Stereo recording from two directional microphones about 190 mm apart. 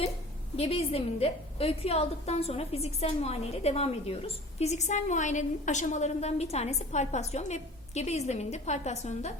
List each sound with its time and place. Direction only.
0.5 s a woman's voice: 30° left (ahead or behind)